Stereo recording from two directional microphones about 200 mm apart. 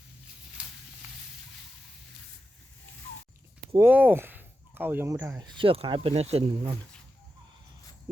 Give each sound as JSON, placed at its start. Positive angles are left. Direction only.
{"t": 3.8, "sound": "speech", "side_deg": -10}